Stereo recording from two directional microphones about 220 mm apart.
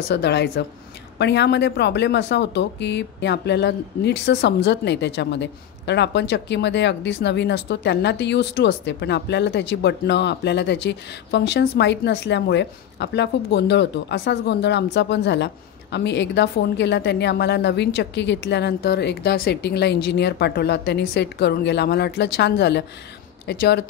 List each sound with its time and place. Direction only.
0.1 s a woman's voice: 50° left (ahead or behind)